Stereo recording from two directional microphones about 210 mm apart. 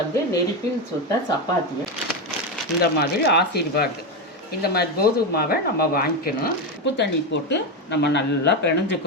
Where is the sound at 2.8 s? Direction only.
50° left (ahead or behind).